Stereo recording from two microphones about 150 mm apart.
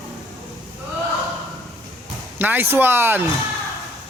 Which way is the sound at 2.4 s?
10° right (ahead or behind).